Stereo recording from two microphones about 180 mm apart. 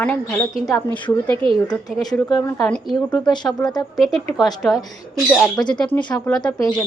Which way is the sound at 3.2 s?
25° left (ahead or behind).